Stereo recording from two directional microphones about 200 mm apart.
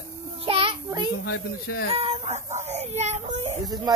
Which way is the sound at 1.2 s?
50° left (ahead or behind).